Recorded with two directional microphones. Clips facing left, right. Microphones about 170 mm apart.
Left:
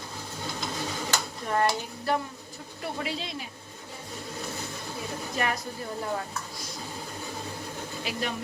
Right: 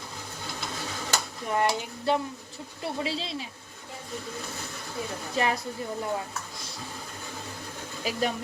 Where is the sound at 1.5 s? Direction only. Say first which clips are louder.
Even; 15° right (ahead or behind).